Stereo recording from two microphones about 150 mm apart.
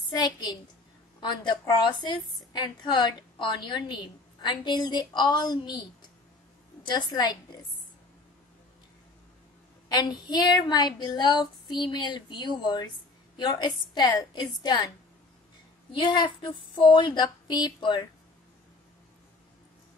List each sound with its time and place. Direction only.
0.1 s a woman's voice: 25° left (ahead or behind)
9.8 s a woman's voice: 25° left (ahead or behind)
15.9 s speech: 30° left (ahead or behind)